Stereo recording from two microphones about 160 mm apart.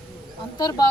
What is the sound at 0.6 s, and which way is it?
Speech, 25° left (ahead or behind).